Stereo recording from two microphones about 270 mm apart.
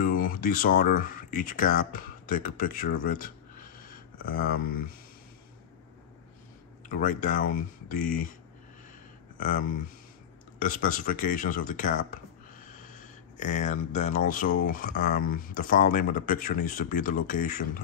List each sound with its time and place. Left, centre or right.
0.0 s speech: left
6.9 s speech: left
9.4 s speech: left